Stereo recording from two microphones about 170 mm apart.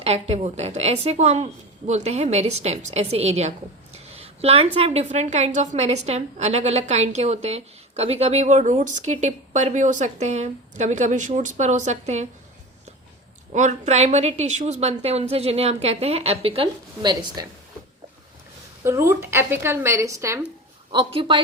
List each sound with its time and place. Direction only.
0.0 s a woman's voice: 35° right (ahead or behind)
13.5 s a woman's voice: 45° right (ahead or behind); by 17.4 s 25° right (ahead or behind)
18.9 s speech: 15° right (ahead or behind)
20.9 s a woman's voice: 30° right (ahead or behind)